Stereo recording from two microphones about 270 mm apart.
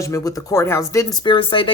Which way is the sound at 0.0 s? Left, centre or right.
Centre.